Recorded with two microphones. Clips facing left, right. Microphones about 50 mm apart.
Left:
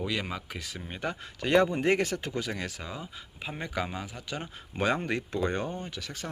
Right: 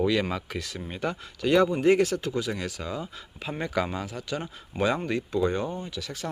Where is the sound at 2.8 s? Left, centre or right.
Centre; by 6.2 s left.